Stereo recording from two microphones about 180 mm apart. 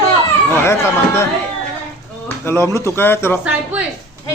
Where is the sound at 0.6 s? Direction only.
15° left (ahead or behind).